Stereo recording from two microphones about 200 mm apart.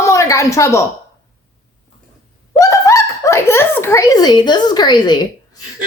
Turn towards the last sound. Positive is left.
turn(degrees=20)  # may be behind; listen again after turning